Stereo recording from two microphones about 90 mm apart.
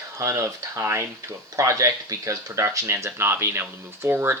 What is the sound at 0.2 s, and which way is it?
Speech, 35° right (ahead or behind).